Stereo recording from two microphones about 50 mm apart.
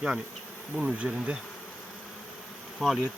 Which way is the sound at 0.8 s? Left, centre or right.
Centre.